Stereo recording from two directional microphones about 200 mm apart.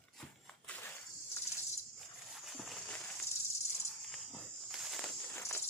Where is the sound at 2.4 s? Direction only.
Centre (ahead or behind).